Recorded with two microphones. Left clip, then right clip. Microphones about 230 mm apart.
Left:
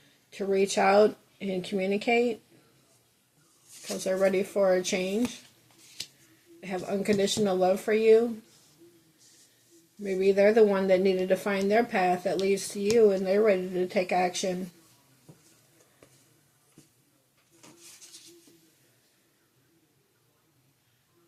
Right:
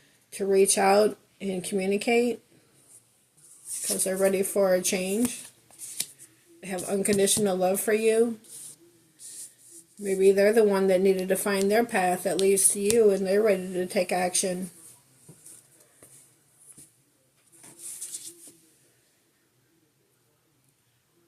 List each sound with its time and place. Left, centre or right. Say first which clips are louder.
0.3 s speech: right 4 dB; right
3.8 s speech: right 1 dB; right
6.6 s speech: right 2 dB; right
10.0 s speech: right 2 dB; right